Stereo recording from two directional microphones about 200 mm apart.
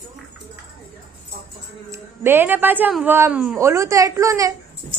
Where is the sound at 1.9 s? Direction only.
10° right (ahead or behind).